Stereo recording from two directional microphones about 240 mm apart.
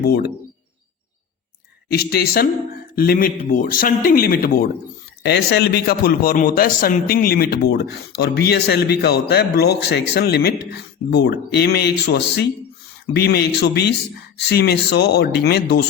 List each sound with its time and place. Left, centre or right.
0.0 s a man's voice: left
1.9 s a man's voice: left